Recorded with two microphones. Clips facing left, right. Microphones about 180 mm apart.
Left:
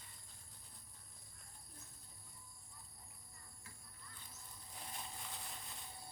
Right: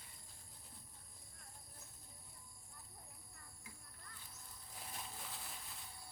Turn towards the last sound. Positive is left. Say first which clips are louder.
# even
turn(degrees=0)  # may be behind; listen again after turning